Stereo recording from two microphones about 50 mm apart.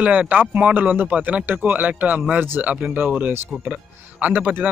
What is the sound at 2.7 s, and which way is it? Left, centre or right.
Speech, right.